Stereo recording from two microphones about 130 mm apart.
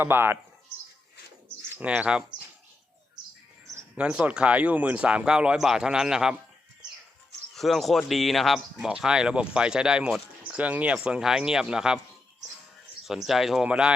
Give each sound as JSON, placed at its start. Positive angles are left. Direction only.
{"t": 0.0, "sound": "speech", "side_deg": -15}
{"t": 1.8, "sound": "speech", "side_deg": -10}
{"t": 3.9, "sound": "speech", "side_deg": -10}
{"t": 7.5, "sound": "speech", "side_deg": 0}
{"t": 13.1, "sound": "speech", "side_deg": 0}